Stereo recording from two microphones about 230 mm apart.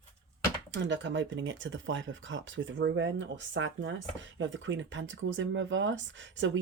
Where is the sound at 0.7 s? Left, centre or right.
Right.